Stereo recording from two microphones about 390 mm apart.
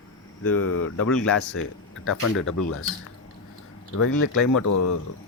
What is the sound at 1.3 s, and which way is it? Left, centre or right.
Speech, left.